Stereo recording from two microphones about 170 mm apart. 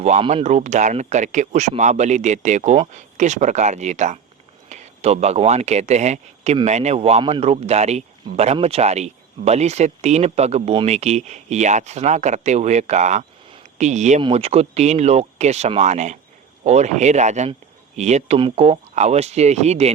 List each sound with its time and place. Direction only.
0.0 s speech: 40° right (ahead or behind)
14.2 s speech: 35° right (ahead or behind)